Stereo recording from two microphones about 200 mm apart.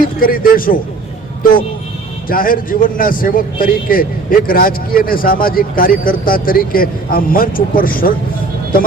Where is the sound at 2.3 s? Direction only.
45° left (ahead or behind).